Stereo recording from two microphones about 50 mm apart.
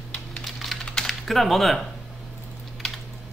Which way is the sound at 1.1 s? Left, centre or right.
Centre.